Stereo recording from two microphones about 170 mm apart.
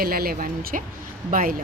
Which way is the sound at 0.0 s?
60° right (ahead or behind).